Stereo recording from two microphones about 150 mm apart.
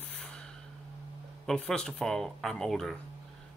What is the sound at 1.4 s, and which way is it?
Speech, 5° left (ahead or behind).